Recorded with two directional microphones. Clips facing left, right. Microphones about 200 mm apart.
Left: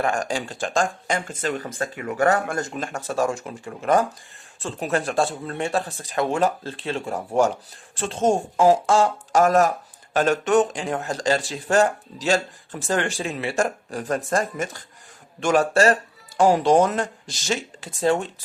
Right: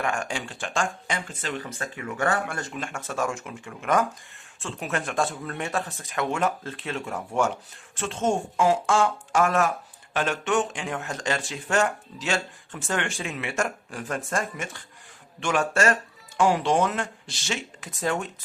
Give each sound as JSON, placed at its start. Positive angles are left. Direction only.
{"t": 0.0, "sound": "speech", "side_deg": 35}